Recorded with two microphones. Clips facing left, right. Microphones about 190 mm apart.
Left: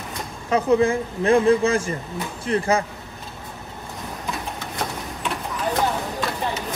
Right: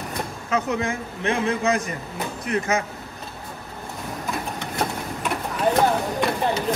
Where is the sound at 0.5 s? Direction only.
30° left (ahead or behind).